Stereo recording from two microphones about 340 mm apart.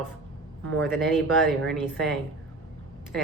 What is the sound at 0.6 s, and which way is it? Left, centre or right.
Speech, centre.